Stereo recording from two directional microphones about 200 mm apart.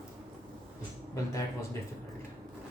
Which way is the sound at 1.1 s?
15° left (ahead or behind).